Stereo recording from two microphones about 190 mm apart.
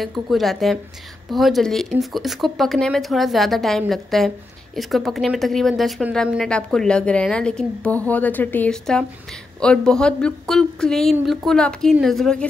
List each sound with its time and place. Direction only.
0.0 s a woman's voice: centre (ahead or behind)